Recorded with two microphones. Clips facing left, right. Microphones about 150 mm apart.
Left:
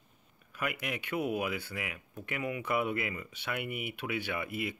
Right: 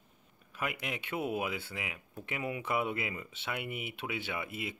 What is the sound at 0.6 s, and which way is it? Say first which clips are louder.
Speech: left 1 dB; 25° right (ahead or behind).